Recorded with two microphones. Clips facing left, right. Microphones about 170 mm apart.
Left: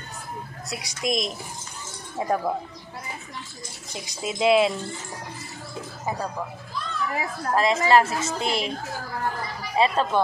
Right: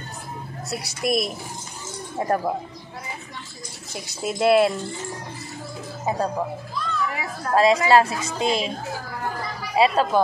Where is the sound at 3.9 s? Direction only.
5° right (ahead or behind).